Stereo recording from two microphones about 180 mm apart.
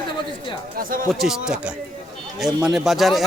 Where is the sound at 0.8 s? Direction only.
50° right (ahead or behind).